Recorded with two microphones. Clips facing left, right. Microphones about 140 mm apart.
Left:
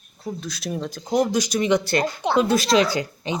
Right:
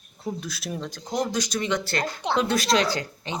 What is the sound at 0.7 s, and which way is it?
Speech, 5° left (ahead or behind).